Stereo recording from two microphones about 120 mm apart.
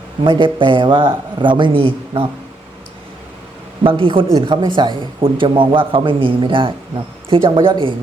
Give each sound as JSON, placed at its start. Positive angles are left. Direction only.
{"t": 0.3, "sound": "a man's voice", "side_deg": -45}
{"t": 3.8, "sound": "a man's voice", "side_deg": -45}